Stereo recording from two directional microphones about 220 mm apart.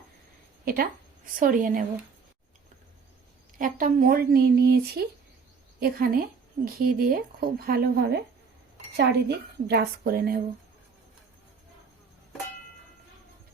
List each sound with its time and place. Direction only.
0.6 s a woman's voice: 40° right (ahead or behind)
3.6 s a woman's voice: 40° right (ahead or behind)